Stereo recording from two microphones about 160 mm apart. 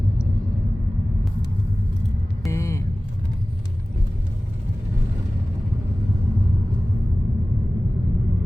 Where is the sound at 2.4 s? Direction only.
20° left (ahead or behind).